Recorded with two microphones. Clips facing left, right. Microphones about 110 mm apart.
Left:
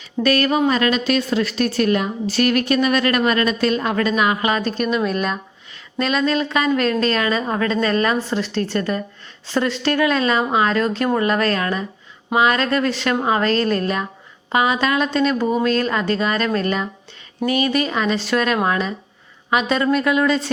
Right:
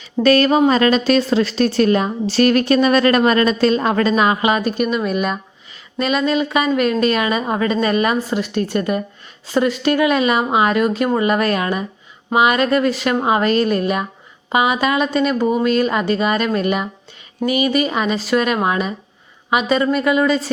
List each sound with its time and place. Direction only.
0.2 s a woman's voice: 30° right (ahead or behind); by 20.5 s 5° right (ahead or behind)